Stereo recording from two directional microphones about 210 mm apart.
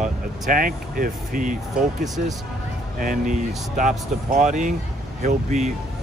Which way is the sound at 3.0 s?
40° right (ahead or behind).